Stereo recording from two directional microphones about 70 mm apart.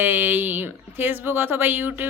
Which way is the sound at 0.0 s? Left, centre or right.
Right.